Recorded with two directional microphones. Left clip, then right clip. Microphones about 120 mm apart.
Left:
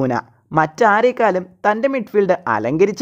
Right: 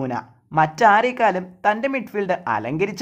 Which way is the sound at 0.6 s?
50° left (ahead or behind).